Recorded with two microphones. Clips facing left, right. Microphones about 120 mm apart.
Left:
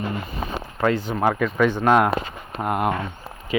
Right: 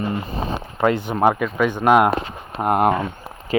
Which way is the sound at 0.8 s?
20° right (ahead or behind).